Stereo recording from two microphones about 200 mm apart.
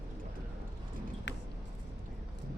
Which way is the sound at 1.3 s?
60° left (ahead or behind).